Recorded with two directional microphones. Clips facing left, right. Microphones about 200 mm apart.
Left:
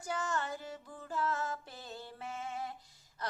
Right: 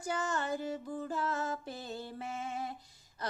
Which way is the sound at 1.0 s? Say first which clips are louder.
Left 1 dB; 20° right (ahead or behind).